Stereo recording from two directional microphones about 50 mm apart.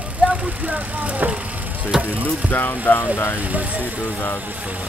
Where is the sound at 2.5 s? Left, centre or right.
Left.